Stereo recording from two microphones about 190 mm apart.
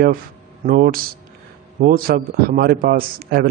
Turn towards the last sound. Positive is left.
turn(degrees=-50)  # may be behind; listen again after turning